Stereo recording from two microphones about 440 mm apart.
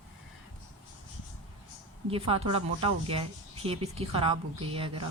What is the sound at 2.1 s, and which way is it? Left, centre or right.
Speech, centre.